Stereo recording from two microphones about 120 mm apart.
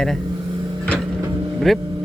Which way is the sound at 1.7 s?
Centre (ahead or behind).